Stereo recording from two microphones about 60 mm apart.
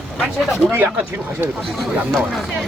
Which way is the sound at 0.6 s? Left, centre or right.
Right.